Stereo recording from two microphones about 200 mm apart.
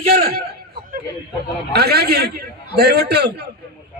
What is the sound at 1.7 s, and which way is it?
A man's voice, 50° right (ahead or behind).